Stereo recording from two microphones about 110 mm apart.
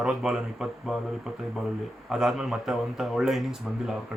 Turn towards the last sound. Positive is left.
turn(degrees=-5)  # may be behind; listen again after turning